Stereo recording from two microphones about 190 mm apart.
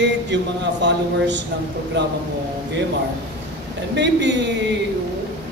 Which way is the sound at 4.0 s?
65° right (ahead or behind).